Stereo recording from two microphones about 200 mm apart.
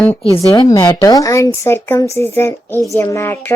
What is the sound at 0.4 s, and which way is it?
A woman's voice, 20° left (ahead or behind).